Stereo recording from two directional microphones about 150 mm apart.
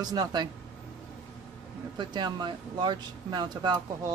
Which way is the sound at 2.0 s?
30° right (ahead or behind).